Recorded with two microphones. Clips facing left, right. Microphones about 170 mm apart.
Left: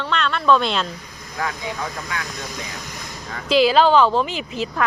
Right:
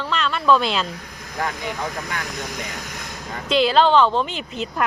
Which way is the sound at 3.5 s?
5° left (ahead or behind).